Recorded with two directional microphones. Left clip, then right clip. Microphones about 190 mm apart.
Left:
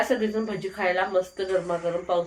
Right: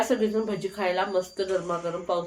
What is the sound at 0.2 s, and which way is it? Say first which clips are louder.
Speech: right 1 dB; 10° right (ahead or behind).